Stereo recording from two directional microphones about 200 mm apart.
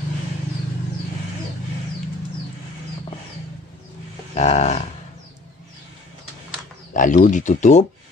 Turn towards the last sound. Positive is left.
turn(degrees=35)  # may be behind; listen again after turning